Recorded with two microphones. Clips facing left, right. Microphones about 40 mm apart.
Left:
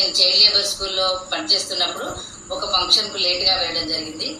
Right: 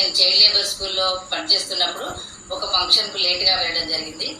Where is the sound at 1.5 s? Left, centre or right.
Centre.